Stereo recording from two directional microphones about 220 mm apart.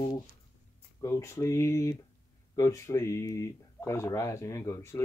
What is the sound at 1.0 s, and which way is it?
Speech, 10° left (ahead or behind).